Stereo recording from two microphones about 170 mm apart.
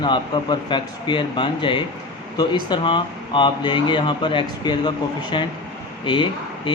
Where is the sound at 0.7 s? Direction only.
30° left (ahead or behind).